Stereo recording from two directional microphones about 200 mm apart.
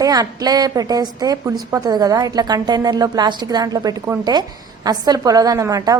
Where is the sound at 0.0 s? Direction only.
20° right (ahead or behind).